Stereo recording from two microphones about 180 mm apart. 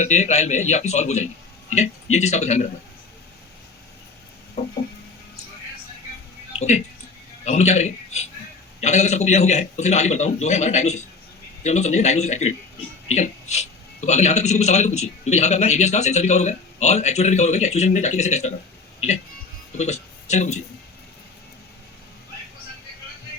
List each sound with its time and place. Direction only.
0.0 s a man's voice: 40° left (ahead or behind)
4.6 s a man's voice: 35° left (ahead or behind)
6.6 s a man's voice: 40° left (ahead or behind)